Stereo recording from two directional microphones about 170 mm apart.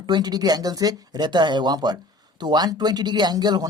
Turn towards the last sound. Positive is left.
turn(degrees=-25)  # may be behind; listen again after turning